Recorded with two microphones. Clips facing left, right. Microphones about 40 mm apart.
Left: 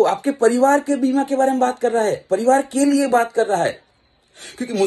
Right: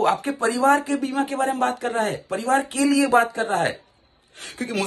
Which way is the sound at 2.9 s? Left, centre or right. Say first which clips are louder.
Right 1 dB; right.